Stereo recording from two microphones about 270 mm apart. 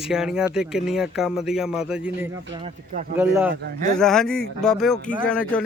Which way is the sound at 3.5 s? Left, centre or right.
Right.